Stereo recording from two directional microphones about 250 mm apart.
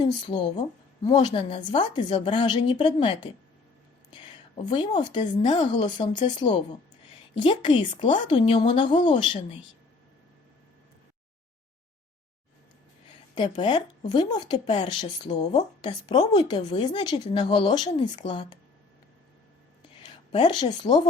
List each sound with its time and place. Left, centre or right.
0.0 s speech: centre
13.3 s speech: centre
20.1 s a woman's voice: centre